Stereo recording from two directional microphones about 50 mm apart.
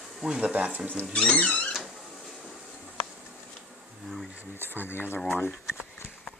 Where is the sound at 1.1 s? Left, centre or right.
Left.